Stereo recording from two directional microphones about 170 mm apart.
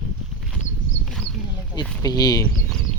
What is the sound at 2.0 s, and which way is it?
Speech, 20° left (ahead or behind).